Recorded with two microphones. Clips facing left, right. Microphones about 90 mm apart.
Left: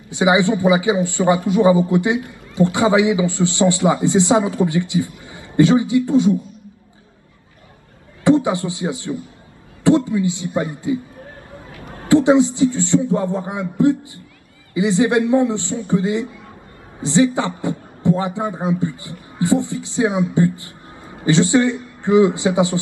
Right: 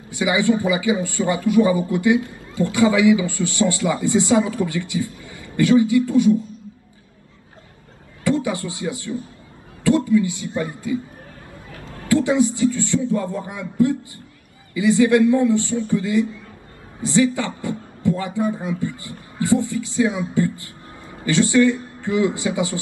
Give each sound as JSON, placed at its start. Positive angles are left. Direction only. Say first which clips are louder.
{"t": 0.1, "sound": "speech", "louder": "left 3 dB", "side_deg": 20}
{"t": 8.2, "sound": "a man's voice", "louder": "left 6 dB", "side_deg": 20}
{"t": 12.1, "sound": "speech", "louder": "left 5 dB", "side_deg": 20}